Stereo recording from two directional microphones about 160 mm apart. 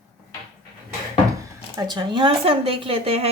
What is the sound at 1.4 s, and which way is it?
Speech, 25° right (ahead or behind).